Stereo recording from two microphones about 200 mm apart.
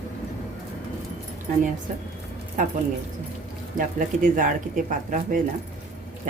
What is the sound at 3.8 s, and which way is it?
Speech, 40° right (ahead or behind).